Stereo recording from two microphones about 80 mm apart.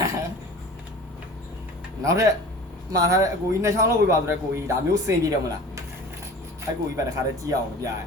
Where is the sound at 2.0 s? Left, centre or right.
Right.